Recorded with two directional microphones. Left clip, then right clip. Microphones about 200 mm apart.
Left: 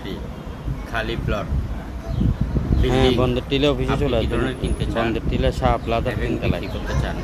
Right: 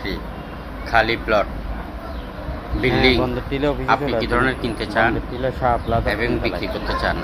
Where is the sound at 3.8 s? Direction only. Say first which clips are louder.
Right 3 dB; 15° left (ahead or behind).